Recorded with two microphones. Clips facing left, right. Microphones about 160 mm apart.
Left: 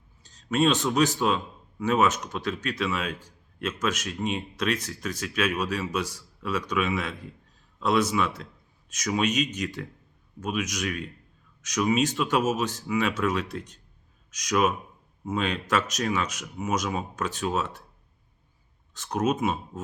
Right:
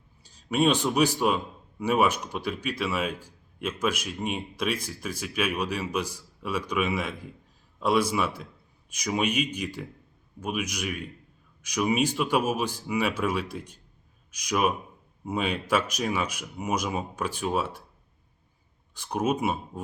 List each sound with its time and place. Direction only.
0.2 s a man's voice: 10° right (ahead or behind)
18.9 s a man's voice: 10° right (ahead or behind)